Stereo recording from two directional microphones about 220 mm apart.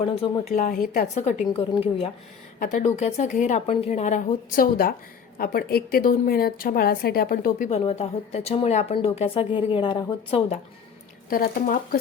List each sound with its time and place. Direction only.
0.0 s a woman's voice: 25° left (ahead or behind)
11.3 s a woman's voice: 40° left (ahead or behind)